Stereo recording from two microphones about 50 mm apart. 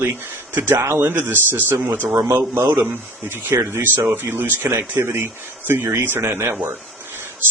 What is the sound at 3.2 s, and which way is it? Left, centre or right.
Speech, right.